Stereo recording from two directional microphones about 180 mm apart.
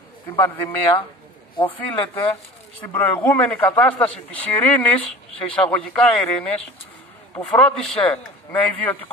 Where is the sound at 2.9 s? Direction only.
10° left (ahead or behind).